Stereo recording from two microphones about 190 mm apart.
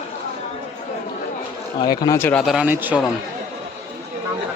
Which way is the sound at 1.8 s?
20° left (ahead or behind).